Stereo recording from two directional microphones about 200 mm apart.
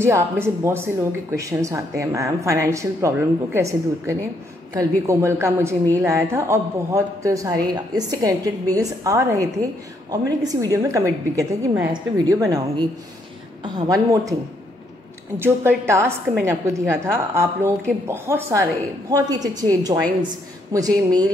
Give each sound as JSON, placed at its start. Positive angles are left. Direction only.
{"t": 0.0, "sound": "a woman's voice", "side_deg": -10}
{"t": 15.3, "sound": "a woman's voice", "side_deg": -10}